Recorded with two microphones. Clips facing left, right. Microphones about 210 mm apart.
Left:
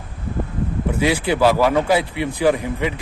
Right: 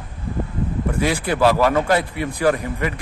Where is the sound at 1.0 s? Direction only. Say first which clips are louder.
Left 2 dB; 5° left (ahead or behind).